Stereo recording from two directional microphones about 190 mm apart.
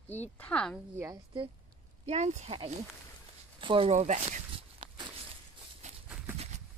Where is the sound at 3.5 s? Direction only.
30° right (ahead or behind).